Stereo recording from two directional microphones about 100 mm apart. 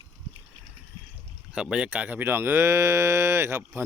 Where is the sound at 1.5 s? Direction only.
10° right (ahead or behind); by 3.8 s 25° right (ahead or behind).